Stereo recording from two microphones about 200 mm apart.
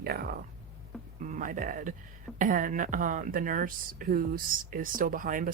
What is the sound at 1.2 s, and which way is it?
Speech, 40° right (ahead or behind).